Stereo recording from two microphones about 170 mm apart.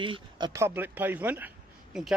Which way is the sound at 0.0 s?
25° right (ahead or behind).